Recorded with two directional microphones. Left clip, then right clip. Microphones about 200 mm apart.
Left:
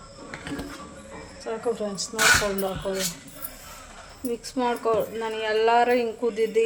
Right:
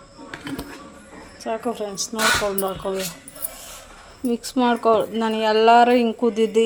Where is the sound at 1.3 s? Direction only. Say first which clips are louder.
Right 2 dB; 55° right (ahead or behind).